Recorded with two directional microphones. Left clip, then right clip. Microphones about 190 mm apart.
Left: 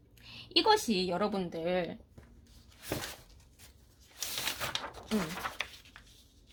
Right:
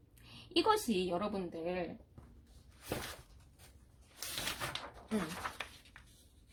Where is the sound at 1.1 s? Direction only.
40° left (ahead or behind).